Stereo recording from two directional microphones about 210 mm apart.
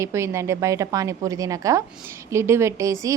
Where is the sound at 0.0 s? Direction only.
15° right (ahead or behind).